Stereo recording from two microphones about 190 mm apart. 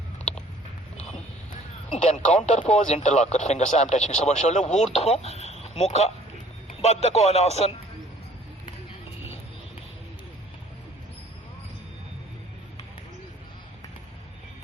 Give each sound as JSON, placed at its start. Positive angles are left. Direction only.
{"t": 2.1, "sound": "speech", "side_deg": 35}